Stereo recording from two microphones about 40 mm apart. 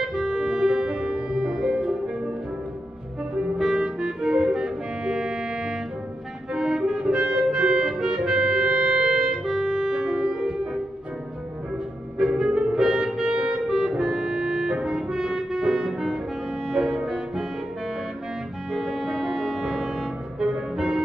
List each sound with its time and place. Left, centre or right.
0.0 s music: centre
3.5 s music: centre
12.2 s music: centre
18.7 s music: centre
19.5 s music: centre
20.5 s music: centre